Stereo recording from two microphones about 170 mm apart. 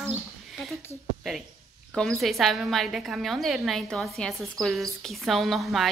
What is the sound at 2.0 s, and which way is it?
A woman's voice, centre (ahead or behind).